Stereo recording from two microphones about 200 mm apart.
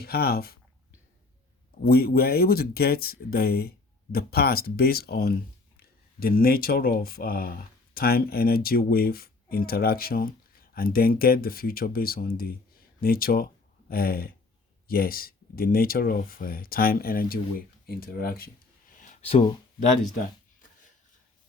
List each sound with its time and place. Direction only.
0.0 s speech: 50° left (ahead or behind)
1.8 s speech: 50° left (ahead or behind)
18.9 s a sound: 35° left (ahead or behind)